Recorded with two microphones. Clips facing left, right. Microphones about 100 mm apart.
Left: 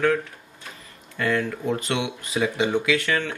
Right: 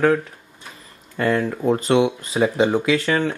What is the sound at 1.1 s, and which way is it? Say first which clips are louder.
Speech: right 4 dB; 35° right (ahead or behind).